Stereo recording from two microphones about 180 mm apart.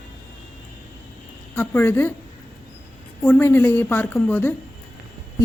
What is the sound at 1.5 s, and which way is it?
Speech, 10° left (ahead or behind).